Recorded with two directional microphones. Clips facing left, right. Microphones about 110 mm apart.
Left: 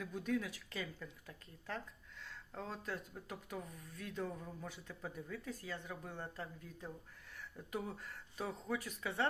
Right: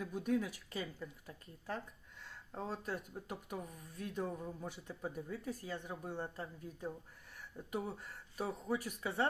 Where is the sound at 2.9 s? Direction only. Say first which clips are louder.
Right 3 dB; 10° right (ahead or behind).